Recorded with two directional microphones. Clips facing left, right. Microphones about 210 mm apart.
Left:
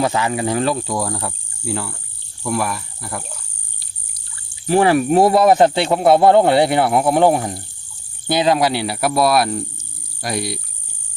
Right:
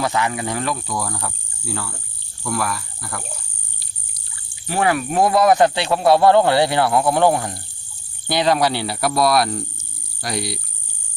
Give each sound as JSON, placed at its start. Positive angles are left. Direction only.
{"t": 0.0, "sound": "speech", "side_deg": 25}
{"t": 2.4, "sound": "cricket", "side_deg": 20}
{"t": 4.7, "sound": "speech", "side_deg": 35}